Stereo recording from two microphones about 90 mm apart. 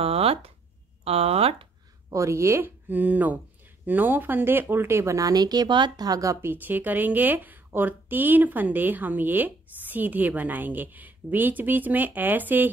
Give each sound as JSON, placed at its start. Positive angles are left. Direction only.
{"t": 0.0, "sound": "a sound", "side_deg": -90}
{"t": 1.0, "sound": "speech", "side_deg": -90}
{"t": 2.1, "sound": "speech", "side_deg": -35}
{"t": 6.4, "sound": "speech", "side_deg": -20}